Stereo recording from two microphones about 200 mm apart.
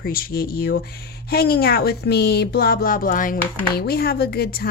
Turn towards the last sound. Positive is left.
turn(degrees=50)  # may be behind; listen again after turning